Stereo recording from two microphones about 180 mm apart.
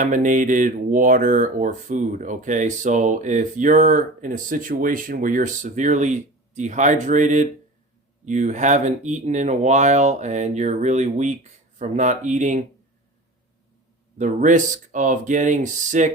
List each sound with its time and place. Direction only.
0.0 s speech: 45° right (ahead or behind)
14.2 s speech: 45° right (ahead or behind)